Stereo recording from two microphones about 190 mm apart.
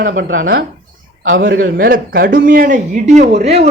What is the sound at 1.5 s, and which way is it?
Speech, 50° right (ahead or behind).